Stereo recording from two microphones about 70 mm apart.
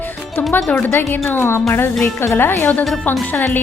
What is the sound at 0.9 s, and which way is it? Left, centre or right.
Speech, left.